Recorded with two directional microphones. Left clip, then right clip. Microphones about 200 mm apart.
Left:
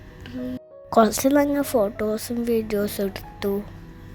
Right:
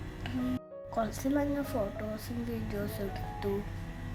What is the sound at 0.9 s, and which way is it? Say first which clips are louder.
Speech: left 15 dB; 50° left (ahead or behind).